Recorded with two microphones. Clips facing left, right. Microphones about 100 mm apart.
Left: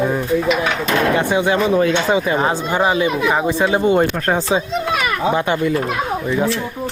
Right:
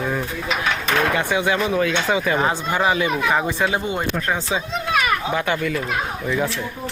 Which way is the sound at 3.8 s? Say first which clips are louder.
Left 8 dB; 45° left (ahead or behind).